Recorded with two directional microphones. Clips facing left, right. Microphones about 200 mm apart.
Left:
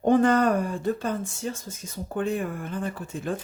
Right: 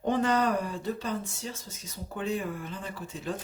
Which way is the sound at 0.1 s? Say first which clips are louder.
Left 6 dB; 50° left (ahead or behind).